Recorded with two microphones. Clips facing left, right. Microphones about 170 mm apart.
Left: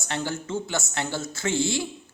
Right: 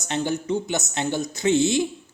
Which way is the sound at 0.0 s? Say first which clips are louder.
Right 5 dB; 20° right (ahead or behind).